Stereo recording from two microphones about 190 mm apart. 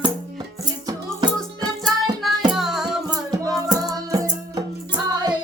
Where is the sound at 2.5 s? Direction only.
Centre (ahead or behind).